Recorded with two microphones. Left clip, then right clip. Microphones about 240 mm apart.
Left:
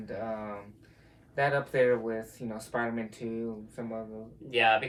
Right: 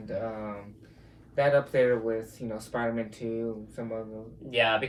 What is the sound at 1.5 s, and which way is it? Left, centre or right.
Speech, left.